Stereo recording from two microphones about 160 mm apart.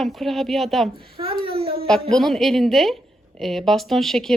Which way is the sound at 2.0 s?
Centre (ahead or behind).